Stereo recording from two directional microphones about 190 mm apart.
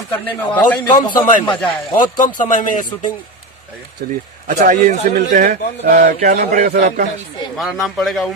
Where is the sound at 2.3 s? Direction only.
40° left (ahead or behind).